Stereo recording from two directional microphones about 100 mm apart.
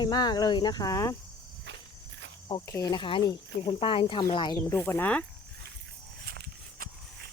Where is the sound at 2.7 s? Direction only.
30° left (ahead or behind).